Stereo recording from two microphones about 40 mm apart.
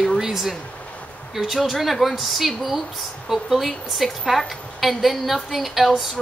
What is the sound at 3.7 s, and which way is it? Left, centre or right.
Speech, centre.